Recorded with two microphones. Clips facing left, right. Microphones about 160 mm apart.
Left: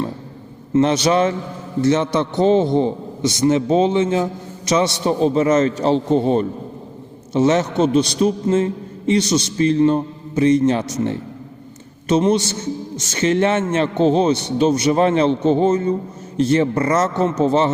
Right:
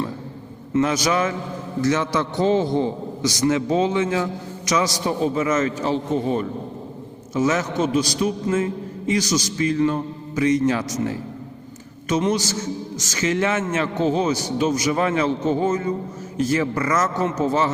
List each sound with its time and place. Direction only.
0.7 s a man's voice: 30° left (ahead or behind)